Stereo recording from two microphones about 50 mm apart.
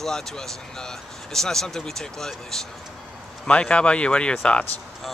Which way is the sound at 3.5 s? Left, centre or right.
Left.